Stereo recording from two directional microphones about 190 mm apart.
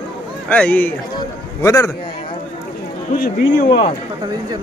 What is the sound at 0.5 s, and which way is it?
A man's voice, 5° left (ahead or behind).